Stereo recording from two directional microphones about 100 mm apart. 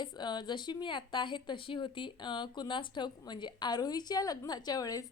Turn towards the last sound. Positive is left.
turn(degrees=35)  # may be behind; listen again after turning